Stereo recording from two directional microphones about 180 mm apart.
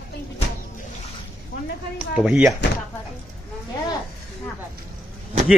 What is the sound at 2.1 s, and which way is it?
Speech, 5° right (ahead or behind).